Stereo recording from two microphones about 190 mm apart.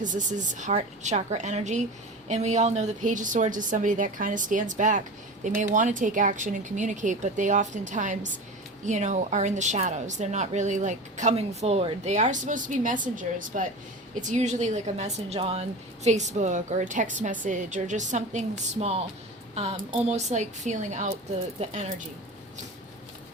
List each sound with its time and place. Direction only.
0.0 s a woman's voice: 40° right (ahead or behind)